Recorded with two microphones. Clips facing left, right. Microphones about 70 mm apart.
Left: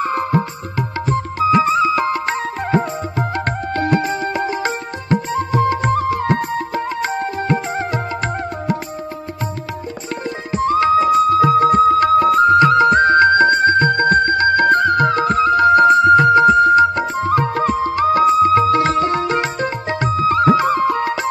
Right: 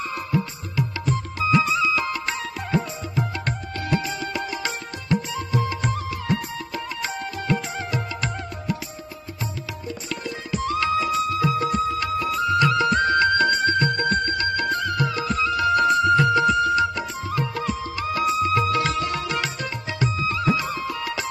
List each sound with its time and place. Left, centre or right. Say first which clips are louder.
0.0 s music: left 8 dB; left
10.5 s music: left 9 dB; left